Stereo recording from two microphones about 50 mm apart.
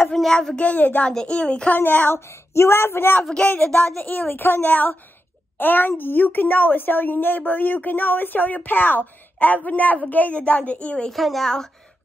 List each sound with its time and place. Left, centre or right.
0.1 s speech: centre
0.6 s a woman's voice: left
1.2 s a woman's voice: left
1.7 s a woman's voice: left
2.1 s speech: left
3.2 s speech: centre
3.4 s a woman's voice: left
11.1 s a woman's voice: centre